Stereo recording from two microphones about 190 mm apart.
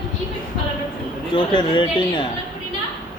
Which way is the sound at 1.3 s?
25° left (ahead or behind).